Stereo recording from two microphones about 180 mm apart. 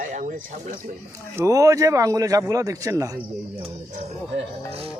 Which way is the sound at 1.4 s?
20° right (ahead or behind).